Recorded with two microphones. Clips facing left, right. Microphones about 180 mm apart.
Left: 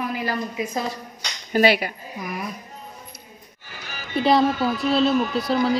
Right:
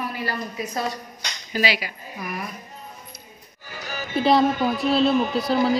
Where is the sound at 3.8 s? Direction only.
40° right (ahead or behind).